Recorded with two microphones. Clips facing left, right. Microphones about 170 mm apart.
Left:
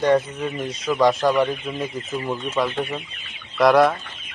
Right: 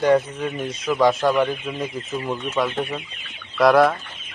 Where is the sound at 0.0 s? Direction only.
Centre (ahead or behind).